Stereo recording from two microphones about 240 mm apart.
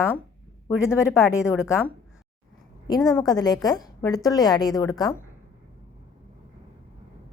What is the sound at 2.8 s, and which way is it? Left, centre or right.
A woman's voice, centre.